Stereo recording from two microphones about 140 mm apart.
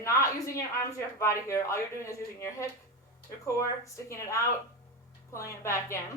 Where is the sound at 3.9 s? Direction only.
20° left (ahead or behind).